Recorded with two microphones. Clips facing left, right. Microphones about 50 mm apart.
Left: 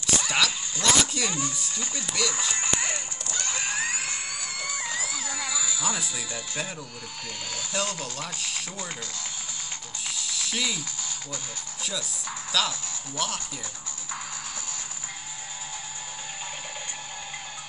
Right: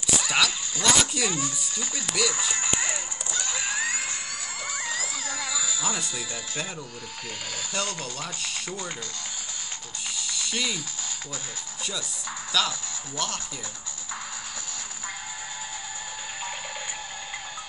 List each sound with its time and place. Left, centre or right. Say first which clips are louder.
0.1 s speech: right 1 dB; centre
2.7 s music: even; centre
3.4 s a sound: even; centre
4.8 s music: even; centre
7.5 s speech: left 1 dB; centre
10.0 s music: even; centre
11.8 s speech: even; centre